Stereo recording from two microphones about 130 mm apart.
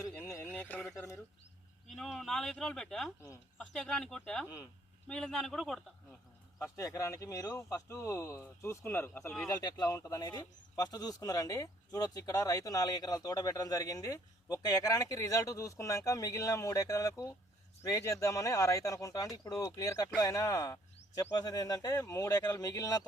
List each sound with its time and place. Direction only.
0.1 s a sound: 10° left (ahead or behind)
1.9 s speech: centre (ahead or behind)
6.6 s speech: 25° left (ahead or behind)
9.6 s speech: 30° left (ahead or behind)